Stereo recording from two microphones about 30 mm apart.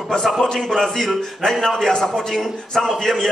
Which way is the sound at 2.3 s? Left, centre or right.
Centre.